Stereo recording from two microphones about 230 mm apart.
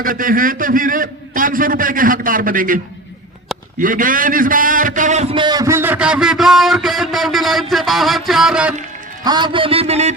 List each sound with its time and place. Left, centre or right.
0.0 s a man's voice: right; by 8.7 s centre
9.2 s a man's voice: centre